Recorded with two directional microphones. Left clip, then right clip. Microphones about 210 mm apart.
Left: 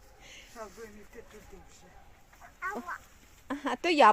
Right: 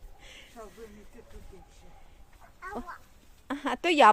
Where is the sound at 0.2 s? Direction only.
10° right (ahead or behind).